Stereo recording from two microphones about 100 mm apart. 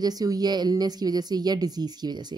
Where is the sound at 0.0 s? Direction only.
40° right (ahead or behind).